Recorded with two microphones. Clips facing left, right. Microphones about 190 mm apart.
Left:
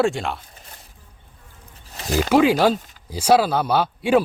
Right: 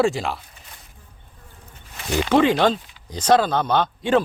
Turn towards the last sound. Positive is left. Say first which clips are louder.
# left 1 dB
turn(degrees=10)  # may be behind; listen again after turning